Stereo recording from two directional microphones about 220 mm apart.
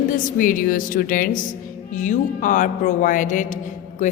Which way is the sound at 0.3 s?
40° left (ahead or behind).